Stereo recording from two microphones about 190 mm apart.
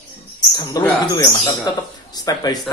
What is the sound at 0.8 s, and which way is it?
Speech, 20° left (ahead or behind).